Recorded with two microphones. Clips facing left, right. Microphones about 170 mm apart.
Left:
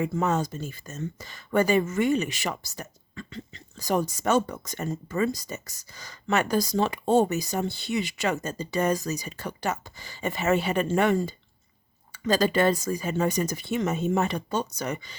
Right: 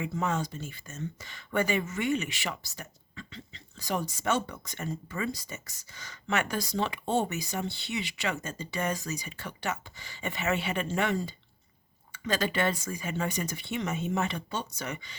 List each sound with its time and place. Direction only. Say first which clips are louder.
0.0 s speech: left 5 dB; 45° left (ahead or behind)
12.1 s speech: left 7 dB; 35° left (ahead or behind)